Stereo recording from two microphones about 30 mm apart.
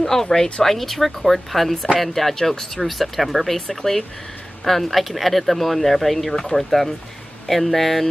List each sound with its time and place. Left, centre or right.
0.0 s speech: centre
2.3 s speech: centre
2.8 s speech: centre